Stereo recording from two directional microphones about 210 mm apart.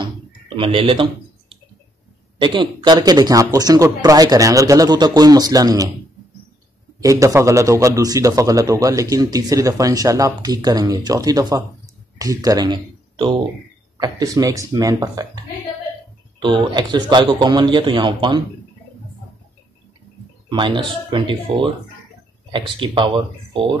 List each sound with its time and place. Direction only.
0.6 s speech: 25° right (ahead or behind)
2.3 s a man's voice: 20° right (ahead or behind)
7.0 s a man's voice: 15° right (ahead or behind)
20.4 s speech: 20° right (ahead or behind)